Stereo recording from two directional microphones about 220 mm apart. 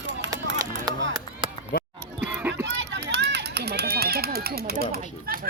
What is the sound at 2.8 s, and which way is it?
Run, 55° right (ahead or behind).